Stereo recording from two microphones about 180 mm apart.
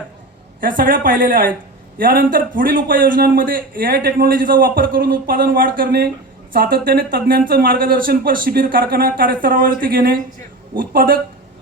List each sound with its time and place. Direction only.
0.6 s a man's voice: 50° right (ahead or behind)